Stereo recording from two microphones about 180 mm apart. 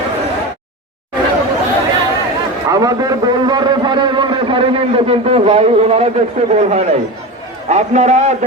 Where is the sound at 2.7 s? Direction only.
20° right (ahead or behind); by 6.1 s 35° right (ahead or behind).